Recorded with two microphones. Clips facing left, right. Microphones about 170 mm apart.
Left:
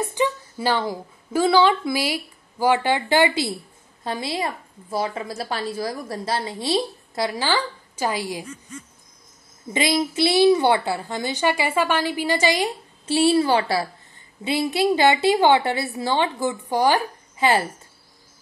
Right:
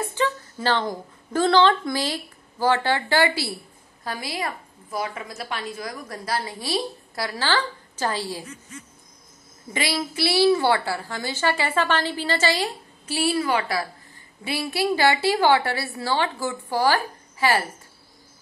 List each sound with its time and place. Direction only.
0.0 s a woman's voice: 15° left (ahead or behind)
9.7 s a woman's voice: 20° left (ahead or behind)